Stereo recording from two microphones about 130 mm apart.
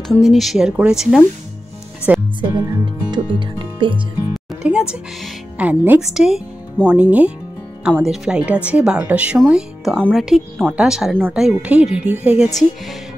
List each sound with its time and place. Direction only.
0.2 s speech: centre (ahead or behind)
2.1 s music: 15° right (ahead or behind)
2.5 s speech: 35° right (ahead or behind)
4.6 s speech: 10° right (ahead or behind)